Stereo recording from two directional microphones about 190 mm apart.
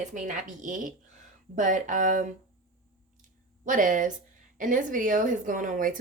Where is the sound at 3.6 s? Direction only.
45° right (ahead or behind).